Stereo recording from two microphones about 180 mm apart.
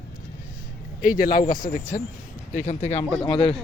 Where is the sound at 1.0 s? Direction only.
50° left (ahead or behind).